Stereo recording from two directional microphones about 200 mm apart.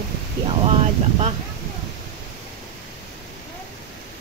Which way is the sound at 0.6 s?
30° right (ahead or behind).